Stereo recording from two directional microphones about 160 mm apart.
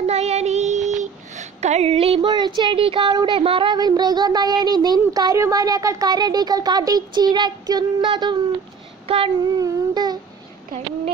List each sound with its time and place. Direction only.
0.0 s child singing: 40° right (ahead or behind)
2.3 s a child's voice: 25° right (ahead or behind)
9.6 s speech: 25° right (ahead or behind)